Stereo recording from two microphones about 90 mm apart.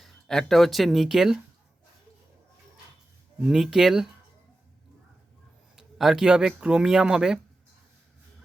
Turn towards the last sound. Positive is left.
turn(degrees=-10)  # may be behind; listen again after turning